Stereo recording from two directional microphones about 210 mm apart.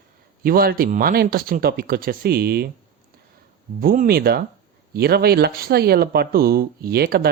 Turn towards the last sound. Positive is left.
turn(degrees=-50)  # may be behind; listen again after turning